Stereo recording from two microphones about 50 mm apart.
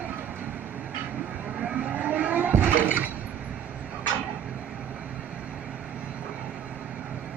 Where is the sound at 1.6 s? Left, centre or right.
Right.